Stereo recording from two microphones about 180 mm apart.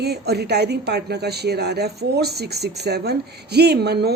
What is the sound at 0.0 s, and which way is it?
A woman's voice, 65° right (ahead or behind).